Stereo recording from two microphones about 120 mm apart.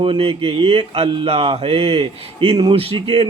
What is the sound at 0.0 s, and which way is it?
Speech, 50° right (ahead or behind).